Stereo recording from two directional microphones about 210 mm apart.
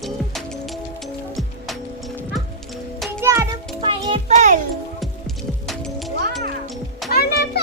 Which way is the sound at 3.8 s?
25° right (ahead or behind).